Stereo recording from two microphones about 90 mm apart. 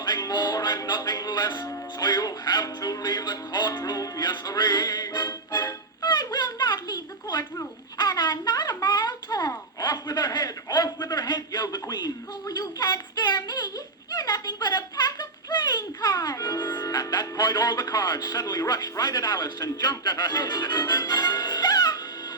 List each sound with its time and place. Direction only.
0.0 s music: 50° left (ahead or behind)
1.6 s a man's voice: 45° left (ahead or behind)
6.0 s a sound: 55° left (ahead or behind)
9.8 s a man's voice: 50° left (ahead or behind)